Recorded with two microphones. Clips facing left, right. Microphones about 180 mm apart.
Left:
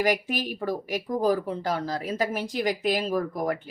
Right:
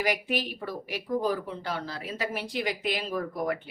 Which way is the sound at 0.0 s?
45° left (ahead or behind).